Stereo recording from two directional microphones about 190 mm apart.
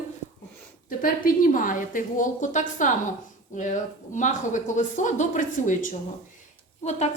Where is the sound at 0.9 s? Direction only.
45° left (ahead or behind).